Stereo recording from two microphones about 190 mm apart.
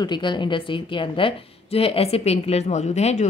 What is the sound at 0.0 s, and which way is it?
Speech, 25° left (ahead or behind).